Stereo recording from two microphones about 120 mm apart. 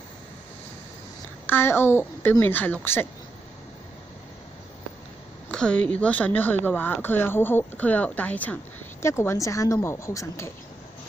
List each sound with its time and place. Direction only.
1.5 s a child's voice: 20° left (ahead or behind)
5.5 s a child's voice: 10° left (ahead or behind); by 10.5 s 25° left (ahead or behind)